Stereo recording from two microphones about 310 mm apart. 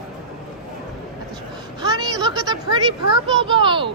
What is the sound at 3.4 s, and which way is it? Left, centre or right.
Speech, centre.